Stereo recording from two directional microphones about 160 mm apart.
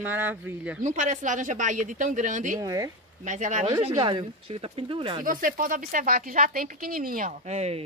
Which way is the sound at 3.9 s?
30° right (ahead or behind).